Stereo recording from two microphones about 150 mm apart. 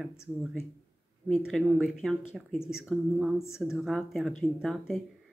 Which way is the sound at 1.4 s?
Centre (ahead or behind).